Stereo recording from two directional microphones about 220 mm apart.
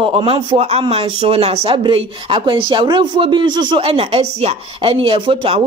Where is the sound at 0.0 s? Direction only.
25° right (ahead or behind).